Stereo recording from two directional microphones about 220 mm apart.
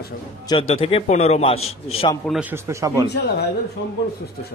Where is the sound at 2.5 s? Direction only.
15° right (ahead or behind).